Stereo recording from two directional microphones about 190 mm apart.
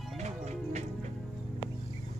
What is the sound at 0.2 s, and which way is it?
Music, 35° right (ahead or behind).